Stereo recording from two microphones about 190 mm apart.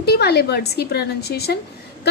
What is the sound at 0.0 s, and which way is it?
A woman's voice, 55° left (ahead or behind).